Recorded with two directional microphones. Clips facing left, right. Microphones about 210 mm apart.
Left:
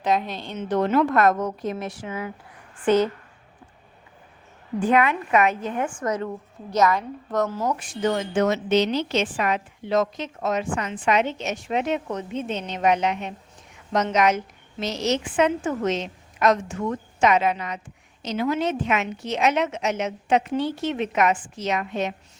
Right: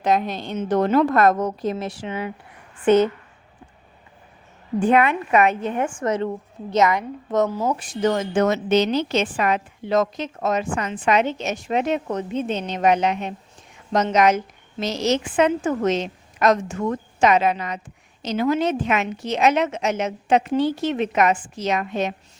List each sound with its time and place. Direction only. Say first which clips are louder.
0.0 s a woman's voice: right 3 dB; 45° right (ahead or behind); by 3.1 s 20° right (ahead or behind)
4.8 s a woman's voice: right 2 dB; 30° right (ahead or behind)
7.7 s a woman's voice: right 3 dB; 35° right (ahead or behind)